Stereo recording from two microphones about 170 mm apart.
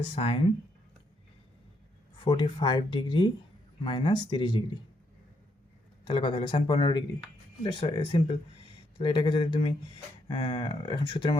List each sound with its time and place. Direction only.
0.2 s speech: 35° left (ahead or behind)
2.2 s speech: 30° left (ahead or behind)
6.1 s speech: 30° left (ahead or behind)